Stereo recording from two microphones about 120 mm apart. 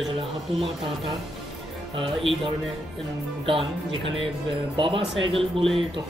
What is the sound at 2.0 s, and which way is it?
Speech, 45° right (ahead or behind).